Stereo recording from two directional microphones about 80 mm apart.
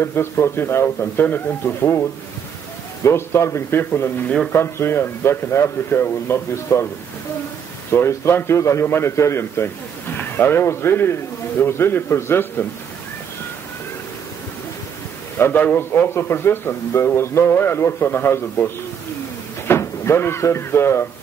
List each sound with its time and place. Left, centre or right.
0.0 s a man's voice: left
7.9 s a man's voice: left
15.3 s a man's voice: left
19.7 s speech: left